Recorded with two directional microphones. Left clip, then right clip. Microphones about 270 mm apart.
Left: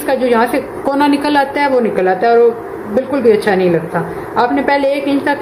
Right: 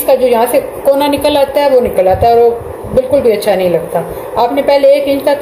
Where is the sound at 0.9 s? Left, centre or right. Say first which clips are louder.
Right 1 dB; left.